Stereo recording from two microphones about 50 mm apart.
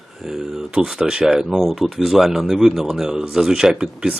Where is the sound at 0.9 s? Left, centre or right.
Centre.